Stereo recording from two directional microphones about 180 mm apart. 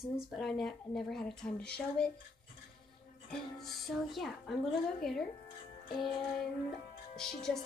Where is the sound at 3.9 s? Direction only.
Centre (ahead or behind).